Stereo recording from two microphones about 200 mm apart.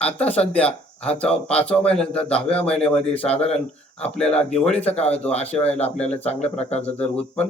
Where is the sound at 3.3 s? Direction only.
30° left (ahead or behind).